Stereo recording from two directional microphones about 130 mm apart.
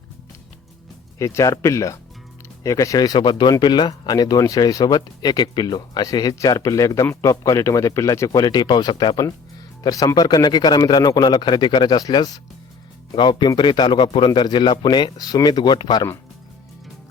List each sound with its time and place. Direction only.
1.2 s speech: 25° left (ahead or behind)